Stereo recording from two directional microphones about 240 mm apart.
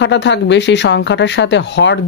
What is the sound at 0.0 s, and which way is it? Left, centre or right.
Speech, left.